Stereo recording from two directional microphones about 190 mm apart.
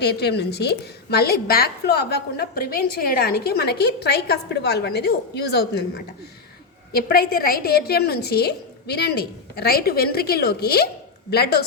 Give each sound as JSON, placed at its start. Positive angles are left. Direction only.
{"t": 0.0, "sound": "a woman's voice", "side_deg": 60}
{"t": 6.9, "sound": "a woman's voice", "side_deg": 50}